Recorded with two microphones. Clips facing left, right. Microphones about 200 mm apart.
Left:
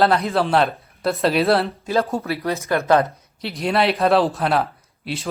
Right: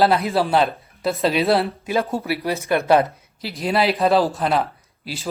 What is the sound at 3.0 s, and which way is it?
Speech, centre (ahead or behind).